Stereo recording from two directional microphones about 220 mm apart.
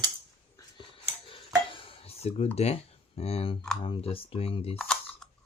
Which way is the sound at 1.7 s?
25° left (ahead or behind).